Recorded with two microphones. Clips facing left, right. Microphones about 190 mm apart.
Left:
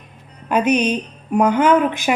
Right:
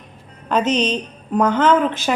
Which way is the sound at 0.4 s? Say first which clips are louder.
Left 2 dB; 10° left (ahead or behind).